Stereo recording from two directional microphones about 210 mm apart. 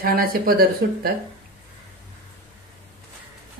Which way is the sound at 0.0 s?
45° right (ahead or behind).